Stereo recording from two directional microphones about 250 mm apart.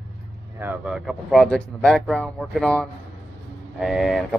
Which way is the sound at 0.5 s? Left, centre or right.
Centre.